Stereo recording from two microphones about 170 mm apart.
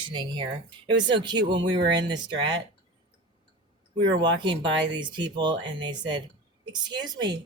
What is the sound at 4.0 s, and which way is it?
Speech, 25° right (ahead or behind).